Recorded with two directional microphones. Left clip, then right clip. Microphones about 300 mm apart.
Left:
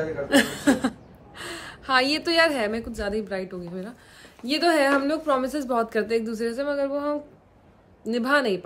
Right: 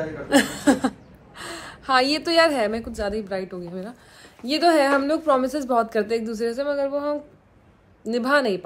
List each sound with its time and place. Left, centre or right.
0.3 s a woman's voice: centre